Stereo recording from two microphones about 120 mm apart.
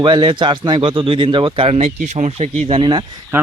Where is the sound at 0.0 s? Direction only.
40° right (ahead or behind).